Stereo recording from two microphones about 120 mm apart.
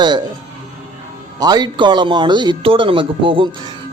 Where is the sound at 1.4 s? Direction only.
35° right (ahead or behind).